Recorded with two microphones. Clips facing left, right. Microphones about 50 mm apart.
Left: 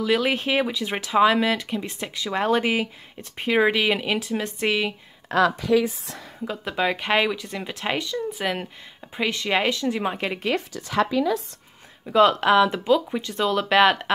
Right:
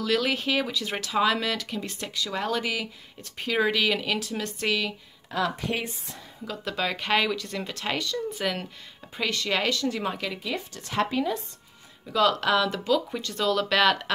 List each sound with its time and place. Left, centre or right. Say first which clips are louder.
0.0 s speech: left 4 dB; centre
5.3 s speech: left 8 dB; left
6.4 s speech: left 5 dB; left
10.5 s speech: left 6 dB; left
12.1 s speech: left 5 dB; left